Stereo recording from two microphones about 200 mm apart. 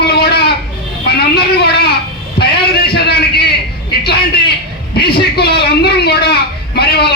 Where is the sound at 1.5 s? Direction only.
55° left (ahead or behind).